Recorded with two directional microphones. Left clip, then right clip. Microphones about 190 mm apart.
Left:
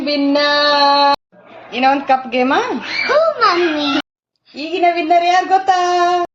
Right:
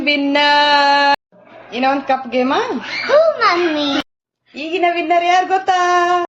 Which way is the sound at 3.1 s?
20° right (ahead or behind).